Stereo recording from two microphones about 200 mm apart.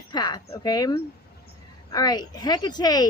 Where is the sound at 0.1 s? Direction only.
20° left (ahead or behind).